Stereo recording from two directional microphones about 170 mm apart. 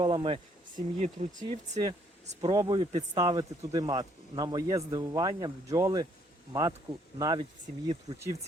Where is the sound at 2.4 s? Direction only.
25° right (ahead or behind).